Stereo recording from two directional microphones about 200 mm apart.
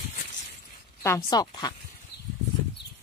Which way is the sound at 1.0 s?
15° left (ahead or behind).